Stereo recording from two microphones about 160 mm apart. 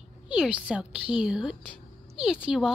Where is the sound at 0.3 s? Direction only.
5° right (ahead or behind).